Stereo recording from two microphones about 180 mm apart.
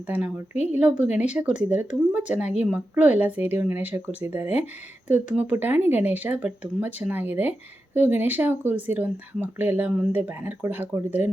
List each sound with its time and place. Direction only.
0.1 s speech: 10° right (ahead or behind)
0.5 s a woman's voice: 40° left (ahead or behind)
0.8 s speech: 10° right (ahead or behind)